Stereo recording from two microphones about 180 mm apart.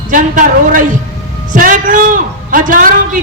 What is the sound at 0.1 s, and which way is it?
A man's voice, 50° right (ahead or behind).